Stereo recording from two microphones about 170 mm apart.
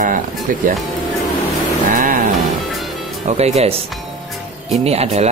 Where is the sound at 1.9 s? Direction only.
50° right (ahead or behind).